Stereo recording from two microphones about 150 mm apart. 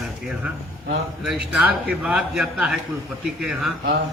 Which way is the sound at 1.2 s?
5° right (ahead or behind).